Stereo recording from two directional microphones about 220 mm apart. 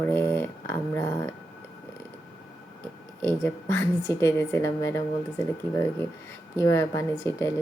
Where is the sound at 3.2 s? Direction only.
10° left (ahead or behind).